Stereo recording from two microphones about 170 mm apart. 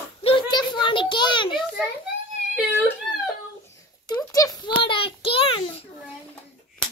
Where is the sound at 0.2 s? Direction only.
30° left (ahead or behind).